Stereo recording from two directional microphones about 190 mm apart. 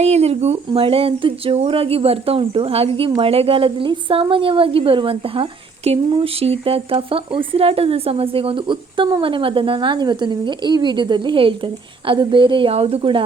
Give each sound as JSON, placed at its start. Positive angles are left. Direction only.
{"t": 0.0, "sound": "a woman's voice", "side_deg": -35}